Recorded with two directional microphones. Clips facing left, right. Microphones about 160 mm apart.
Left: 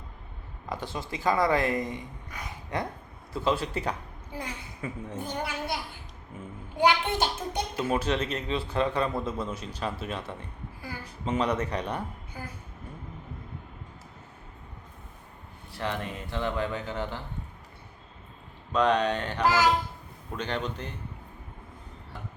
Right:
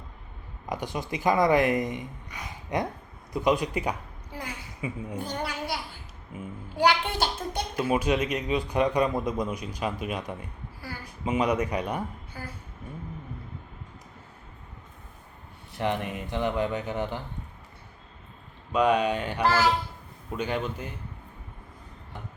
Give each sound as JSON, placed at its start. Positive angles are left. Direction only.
{"t": 0.7, "sound": "a man's voice", "side_deg": -15}
{"t": 5.2, "sound": "a child's voice", "side_deg": 20}
{"t": 6.3, "sound": "a man's voice", "side_deg": -10}
{"t": 6.7, "sound": "a child's voice", "side_deg": 20}
{"t": 7.8, "sound": "a man's voice", "side_deg": -10}
{"t": 15.7, "sound": "speech", "side_deg": -20}
{"t": 18.7, "sound": "a man's voice", "side_deg": -10}
{"t": 19.5, "sound": "speech", "side_deg": 15}
{"t": 20.3, "sound": "a man's voice", "side_deg": -10}